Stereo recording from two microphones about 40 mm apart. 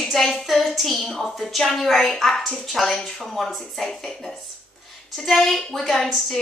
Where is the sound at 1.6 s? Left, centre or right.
Centre.